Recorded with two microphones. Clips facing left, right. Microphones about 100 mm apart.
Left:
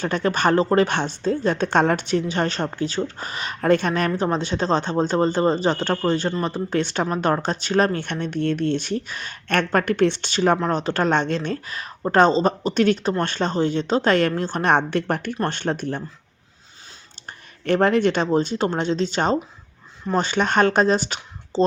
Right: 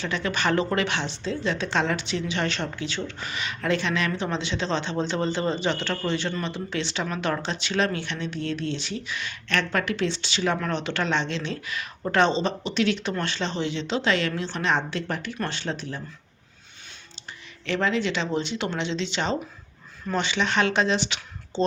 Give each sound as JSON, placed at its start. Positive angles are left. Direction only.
{"t": 0.0, "sound": "speech", "side_deg": 45}
{"t": 17.7, "sound": "speech", "side_deg": 50}